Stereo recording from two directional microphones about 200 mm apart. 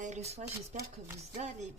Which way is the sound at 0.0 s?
35° right (ahead or behind).